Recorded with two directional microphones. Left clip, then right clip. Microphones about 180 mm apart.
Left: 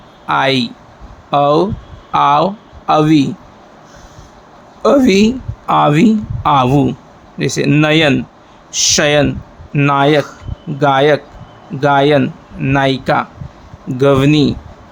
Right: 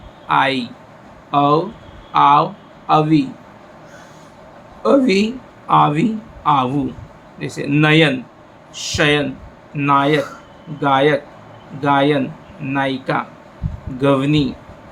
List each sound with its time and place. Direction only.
0.3 s speech: 65° left (ahead or behind)
4.8 s speech: 65° left (ahead or behind)